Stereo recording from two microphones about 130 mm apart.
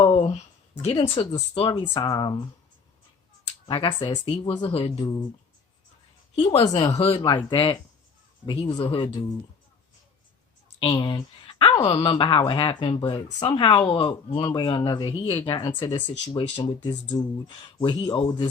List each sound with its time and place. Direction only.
0.0 s a sound: 40° left (ahead or behind)
0.9 s speech: 40° left (ahead or behind)
3.7 s speech: 35° left (ahead or behind)
6.3 s speech: 45° left (ahead or behind)
6.7 s speech: 25° left (ahead or behind)
6.9 s speech: 50° left (ahead or behind)
7.2 s speech: 35° left (ahead or behind)
10.8 s speech: 40° left (ahead or behind)